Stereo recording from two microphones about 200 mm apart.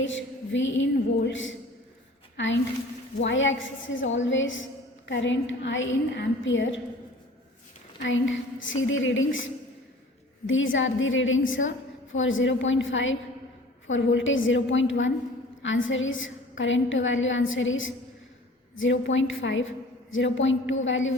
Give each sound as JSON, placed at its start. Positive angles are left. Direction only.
{"t": 0.0, "sound": "a woman's voice", "side_deg": 70}
{"t": 8.0, "sound": "a woman's voice", "side_deg": 70}